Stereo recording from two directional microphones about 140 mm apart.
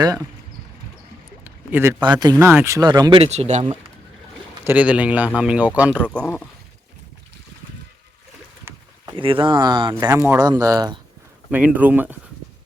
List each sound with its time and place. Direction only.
1.5 s a sound: 15° right (ahead or behind)
2.0 s speech: 30° right (ahead or behind)
2.4 s speech: 15° right (ahead or behind)
3.2 s speech: 50° right (ahead or behind)
4.6 s speech: 10° right (ahead or behind)
6.2 s speech: 15° left (ahead or behind)
9.2 s speech: 40° right (ahead or behind)
11.5 s speech: 10° right (ahead or behind)